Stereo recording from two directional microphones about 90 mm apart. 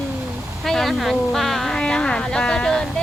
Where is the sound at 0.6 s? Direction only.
Centre (ahead or behind).